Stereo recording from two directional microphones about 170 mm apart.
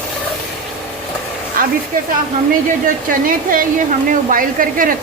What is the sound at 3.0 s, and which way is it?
A woman's voice, 55° right (ahead or behind).